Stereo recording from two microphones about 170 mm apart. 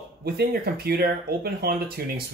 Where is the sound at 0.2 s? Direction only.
65° right (ahead or behind).